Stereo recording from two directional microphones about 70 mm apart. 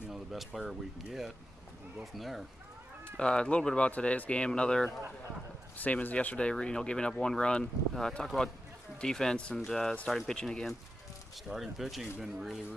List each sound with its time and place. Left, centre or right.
0.1 s speech: centre
3.2 s speech: centre
5.8 s speech: left
11.4 s speech: centre